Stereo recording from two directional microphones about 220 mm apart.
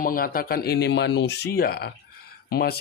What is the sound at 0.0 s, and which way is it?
Speech, 40° left (ahead or behind).